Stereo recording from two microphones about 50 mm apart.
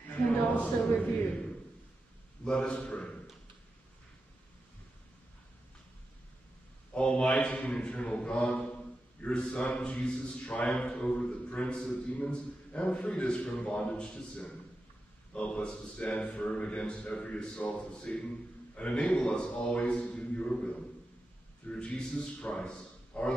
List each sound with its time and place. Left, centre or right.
0.5 s a man's voice: left
2.4 s a man's voice: centre
6.9 s a man's voice: left